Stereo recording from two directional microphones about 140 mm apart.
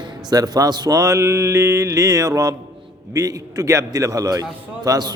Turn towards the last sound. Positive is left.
turn(degrees=-30)  # may be behind; listen again after turning